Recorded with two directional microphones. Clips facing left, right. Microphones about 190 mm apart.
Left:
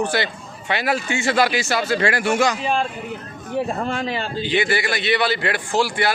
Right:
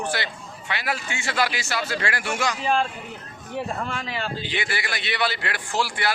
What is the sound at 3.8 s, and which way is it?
A man's voice, 30° left (ahead or behind).